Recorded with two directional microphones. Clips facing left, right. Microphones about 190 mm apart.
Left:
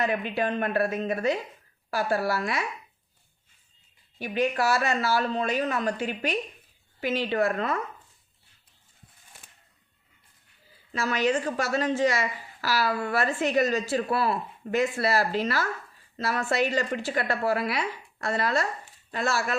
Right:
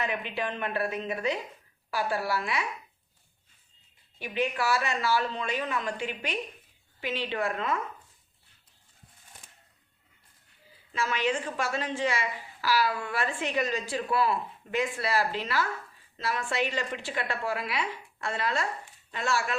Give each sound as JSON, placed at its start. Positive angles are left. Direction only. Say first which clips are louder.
{"t": 0.0, "sound": "speech", "louder": "left 5 dB", "side_deg": 40}
{"t": 4.2, "sound": "a woman's voice", "louder": "left 4 dB", "side_deg": 40}
{"t": 10.9, "sound": "a woman's voice", "louder": "left 4 dB", "side_deg": 40}